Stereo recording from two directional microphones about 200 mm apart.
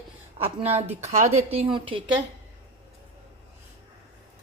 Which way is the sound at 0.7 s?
35° right (ahead or behind).